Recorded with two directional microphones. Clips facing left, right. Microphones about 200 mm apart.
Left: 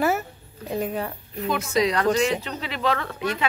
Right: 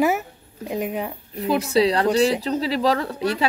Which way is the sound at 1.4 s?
35° right (ahead or behind).